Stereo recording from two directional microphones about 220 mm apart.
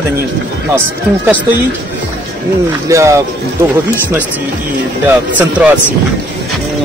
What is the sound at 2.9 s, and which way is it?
Speech, 15° right (ahead or behind).